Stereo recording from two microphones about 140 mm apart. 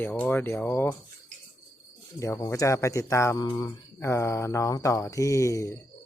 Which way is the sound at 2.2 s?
20° left (ahead or behind).